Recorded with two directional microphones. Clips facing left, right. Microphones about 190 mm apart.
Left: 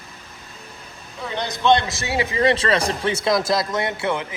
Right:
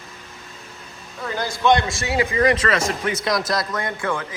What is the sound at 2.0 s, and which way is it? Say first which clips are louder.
Speech: right 1 dB; 25° left (ahead or behind).